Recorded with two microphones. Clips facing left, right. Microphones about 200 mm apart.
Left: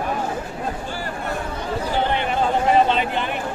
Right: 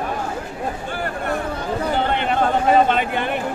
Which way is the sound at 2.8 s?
50° right (ahead or behind).